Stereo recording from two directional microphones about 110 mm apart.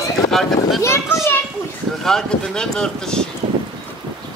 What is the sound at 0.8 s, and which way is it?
Children playing, 25° left (ahead or behind).